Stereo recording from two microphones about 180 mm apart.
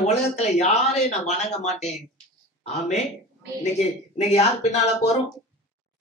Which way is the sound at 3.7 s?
35° left (ahead or behind).